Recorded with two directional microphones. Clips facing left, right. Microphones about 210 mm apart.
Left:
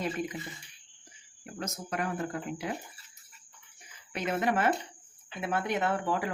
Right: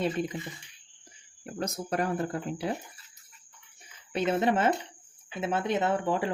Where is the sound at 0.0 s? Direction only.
30° right (ahead or behind).